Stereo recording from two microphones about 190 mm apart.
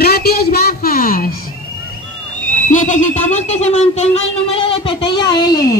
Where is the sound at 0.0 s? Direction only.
55° left (ahead or behind).